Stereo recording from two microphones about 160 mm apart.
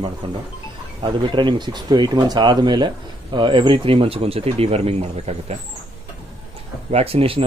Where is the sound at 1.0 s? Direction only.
30° right (ahead or behind).